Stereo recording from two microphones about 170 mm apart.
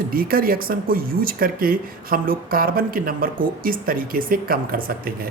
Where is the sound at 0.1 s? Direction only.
60° right (ahead or behind).